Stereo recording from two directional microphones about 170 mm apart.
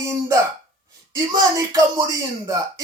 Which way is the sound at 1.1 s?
20° right (ahead or behind).